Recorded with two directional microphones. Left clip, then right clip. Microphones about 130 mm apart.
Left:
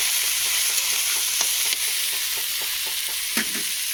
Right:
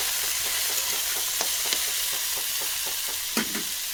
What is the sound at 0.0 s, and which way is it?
Stir, 45° right (ahead or behind).